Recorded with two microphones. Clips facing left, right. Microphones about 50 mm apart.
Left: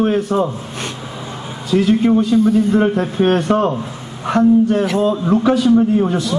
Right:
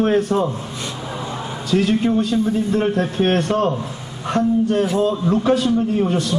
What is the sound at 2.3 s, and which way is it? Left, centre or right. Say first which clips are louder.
Speech: left 6 dB; centre.